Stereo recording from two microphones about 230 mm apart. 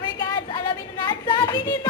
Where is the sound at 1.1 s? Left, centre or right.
Centre.